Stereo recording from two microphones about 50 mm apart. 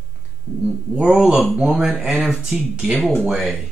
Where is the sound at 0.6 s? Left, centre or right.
Right.